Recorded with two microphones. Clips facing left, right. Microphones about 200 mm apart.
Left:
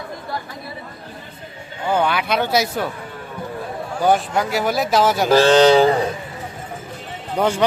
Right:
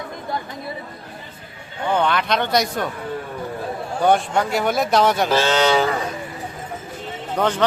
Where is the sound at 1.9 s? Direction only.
5° left (ahead or behind).